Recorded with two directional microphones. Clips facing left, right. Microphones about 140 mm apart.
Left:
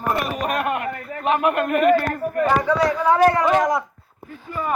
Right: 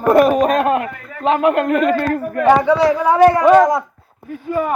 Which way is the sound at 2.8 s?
25° right (ahead or behind).